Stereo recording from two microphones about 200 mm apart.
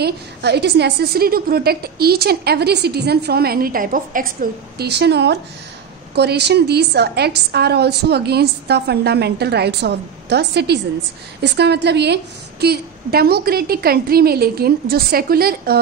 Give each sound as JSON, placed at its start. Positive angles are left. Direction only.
{"t": 0.0, "sound": "a woman's voice", "side_deg": -55}